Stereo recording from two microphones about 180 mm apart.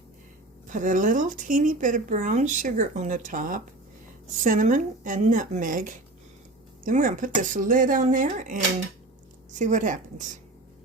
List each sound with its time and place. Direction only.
0.7 s speech: 45° right (ahead or behind)